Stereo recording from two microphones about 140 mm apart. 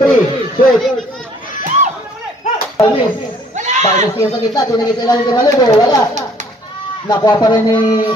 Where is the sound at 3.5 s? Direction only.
60° right (ahead or behind).